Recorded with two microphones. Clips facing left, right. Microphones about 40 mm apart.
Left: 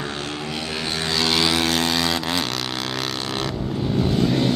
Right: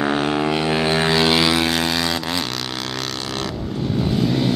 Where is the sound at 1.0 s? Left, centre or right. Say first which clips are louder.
Right 2 dB; right.